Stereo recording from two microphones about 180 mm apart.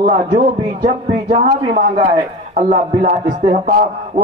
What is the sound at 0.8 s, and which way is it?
A man's voice, 40° right (ahead or behind).